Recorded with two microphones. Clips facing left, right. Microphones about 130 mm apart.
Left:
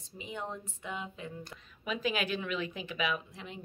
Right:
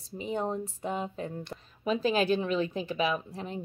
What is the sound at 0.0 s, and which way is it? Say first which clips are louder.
A woman's voice: right 9 dB; 35° right (ahead or behind).